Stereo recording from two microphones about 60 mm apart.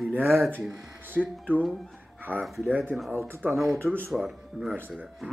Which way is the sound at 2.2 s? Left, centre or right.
Right.